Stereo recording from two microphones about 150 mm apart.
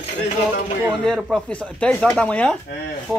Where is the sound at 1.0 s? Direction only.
5° left (ahead or behind).